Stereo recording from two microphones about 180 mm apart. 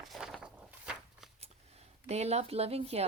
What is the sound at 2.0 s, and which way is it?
A woman's voice, 35° right (ahead or behind).